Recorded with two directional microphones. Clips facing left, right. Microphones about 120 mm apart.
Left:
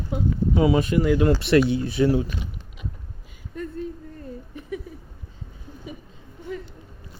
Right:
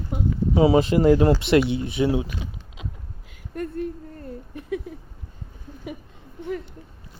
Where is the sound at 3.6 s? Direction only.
60° right (ahead or behind).